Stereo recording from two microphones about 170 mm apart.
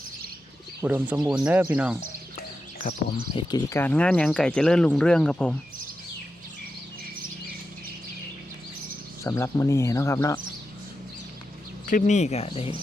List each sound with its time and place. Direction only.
0.8 s speech: 10° right (ahead or behind)
3.3 s speech: 30° left (ahead or behind)
3.7 s speech: 10° left (ahead or behind)
9.2 s speech: 15° left (ahead or behind)
11.9 s speech: 50° left (ahead or behind)